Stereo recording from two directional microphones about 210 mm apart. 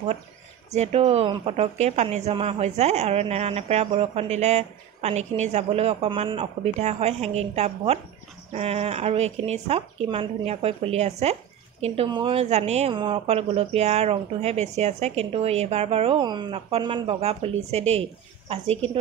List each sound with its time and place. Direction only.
0.7 s a woman's voice: 30° right (ahead or behind)